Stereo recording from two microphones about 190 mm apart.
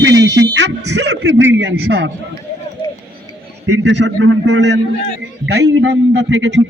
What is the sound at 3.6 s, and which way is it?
A man's voice, 70° right (ahead or behind).